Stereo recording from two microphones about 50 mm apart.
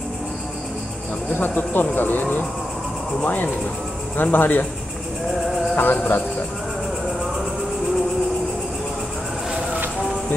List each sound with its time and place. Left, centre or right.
1.3 s speech: left
4.2 s speech: left
5.8 s speech: left